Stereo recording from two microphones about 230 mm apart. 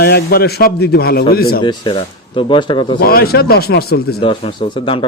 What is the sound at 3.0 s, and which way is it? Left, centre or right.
A man's voice, left.